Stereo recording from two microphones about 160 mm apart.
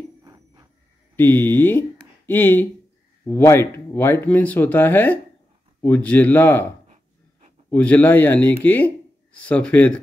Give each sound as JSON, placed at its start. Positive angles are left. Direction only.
{"t": 0.2, "sound": "cricket", "side_deg": -25}
{"t": 1.1, "sound": "speech", "side_deg": 15}
{"t": 7.7, "sound": "speech", "side_deg": 10}